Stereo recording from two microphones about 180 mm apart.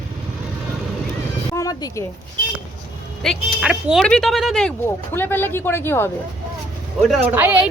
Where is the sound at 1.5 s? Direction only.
15° left (ahead or behind).